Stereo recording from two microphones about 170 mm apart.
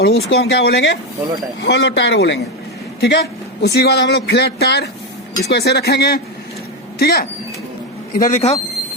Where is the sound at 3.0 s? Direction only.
75° left (ahead or behind).